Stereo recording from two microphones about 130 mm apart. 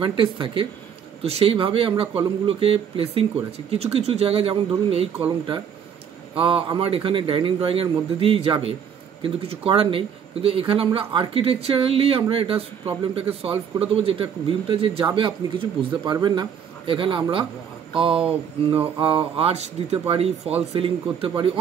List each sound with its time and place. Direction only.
0.0 s speech: 40° right (ahead or behind)
6.3 s speech: 45° right (ahead or behind)